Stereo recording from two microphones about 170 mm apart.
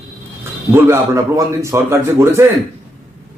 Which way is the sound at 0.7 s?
15° right (ahead or behind).